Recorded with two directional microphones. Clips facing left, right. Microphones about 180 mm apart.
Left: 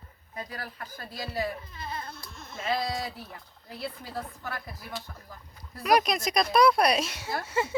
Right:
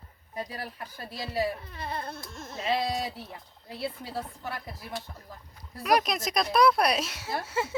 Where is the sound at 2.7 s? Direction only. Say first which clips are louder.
Right 1 dB; 25° right (ahead or behind).